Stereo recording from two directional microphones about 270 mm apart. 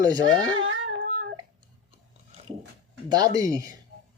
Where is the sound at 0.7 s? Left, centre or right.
Right.